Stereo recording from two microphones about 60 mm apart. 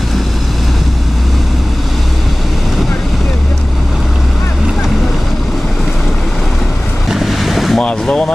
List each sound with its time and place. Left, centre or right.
7.1 s boat: centre
7.8 s vehicle: centre